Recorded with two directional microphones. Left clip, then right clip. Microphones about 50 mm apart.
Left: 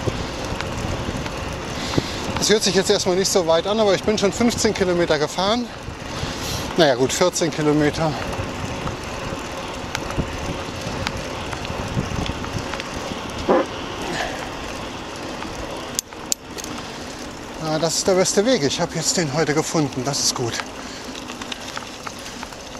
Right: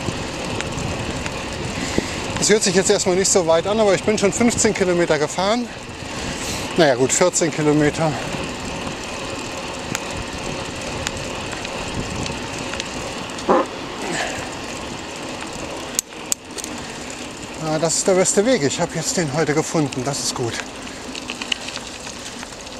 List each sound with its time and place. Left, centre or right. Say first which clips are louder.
1.8 s speech: even; centre
13.6 s dog: right 1 dB; centre
17.6 s speech: right 1 dB; centre